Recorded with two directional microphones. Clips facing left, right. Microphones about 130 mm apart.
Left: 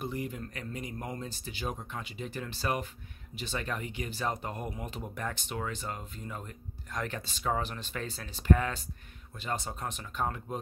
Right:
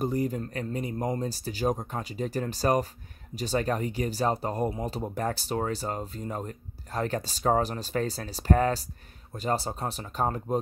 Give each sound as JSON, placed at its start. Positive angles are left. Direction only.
{"t": 0.0, "sound": "speech", "side_deg": -40}